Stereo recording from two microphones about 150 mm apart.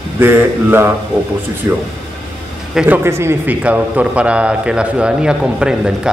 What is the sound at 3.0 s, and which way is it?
A man's voice, 15° right (ahead or behind).